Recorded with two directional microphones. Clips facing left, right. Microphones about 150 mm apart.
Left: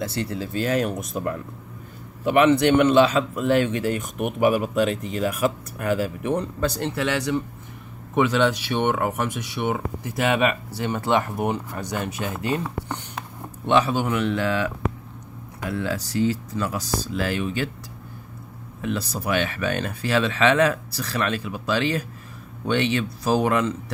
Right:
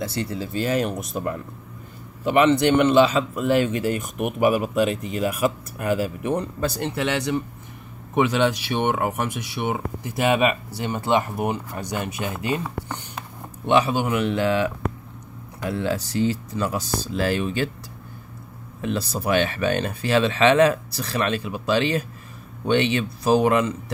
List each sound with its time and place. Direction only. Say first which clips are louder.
0.0 s speech: even; centre (ahead or behind)
6.8 s speech: even; 20° right (ahead or behind)
15.7 s speech: right 1 dB; 25° right (ahead or behind)
18.8 s speech: right 1 dB; 30° right (ahead or behind)